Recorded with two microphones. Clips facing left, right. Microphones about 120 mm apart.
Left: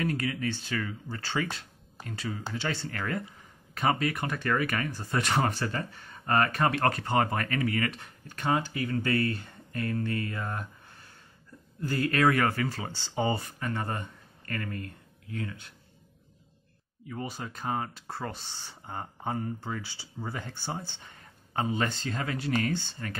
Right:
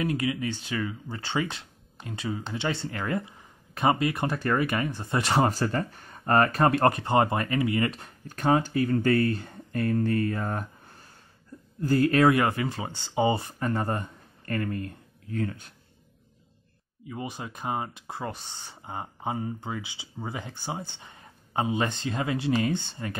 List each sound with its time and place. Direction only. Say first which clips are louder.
0.0 s speech: right 3 dB; 15° right (ahead or behind)
5.5 s speech: right 5 dB; 40° right (ahead or behind)
7.0 s speech: right 4 dB; 25° right (ahead or behind)
8.0 s speech: right 6 dB; 40° right (ahead or behind)
12.4 s speech: right 2 dB; 20° right (ahead or behind); by 15.7 s 40° right (ahead or behind)
17.1 s speech: right 1 dB; 10° right (ahead or behind)